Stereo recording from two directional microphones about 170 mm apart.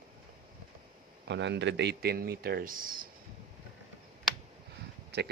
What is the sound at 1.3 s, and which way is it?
Speech, 90° right.